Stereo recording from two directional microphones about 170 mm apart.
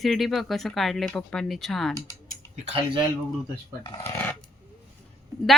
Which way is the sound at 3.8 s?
25° left (ahead or behind).